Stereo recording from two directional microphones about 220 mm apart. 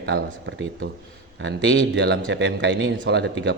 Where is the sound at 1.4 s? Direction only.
60° right (ahead or behind).